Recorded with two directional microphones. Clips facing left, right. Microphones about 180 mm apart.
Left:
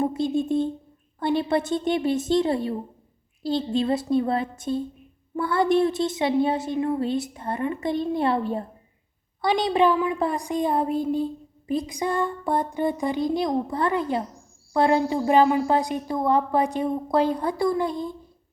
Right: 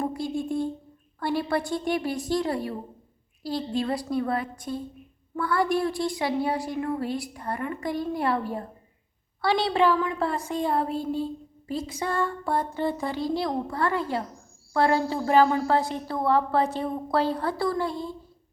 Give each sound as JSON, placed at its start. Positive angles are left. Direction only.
{"t": 0.0, "sound": "a woman's voice", "side_deg": 25}